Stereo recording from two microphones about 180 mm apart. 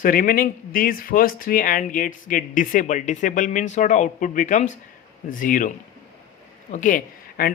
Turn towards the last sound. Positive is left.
turn(degrees=50)  # may be behind; listen again after turning